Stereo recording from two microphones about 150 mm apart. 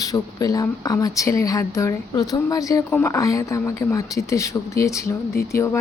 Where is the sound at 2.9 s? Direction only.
10° left (ahead or behind).